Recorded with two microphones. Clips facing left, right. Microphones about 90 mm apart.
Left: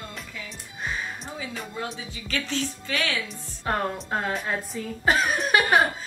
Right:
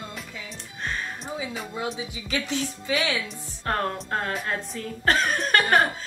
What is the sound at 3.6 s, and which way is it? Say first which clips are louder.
A woman's voice: even; 10° left (ahead or behind).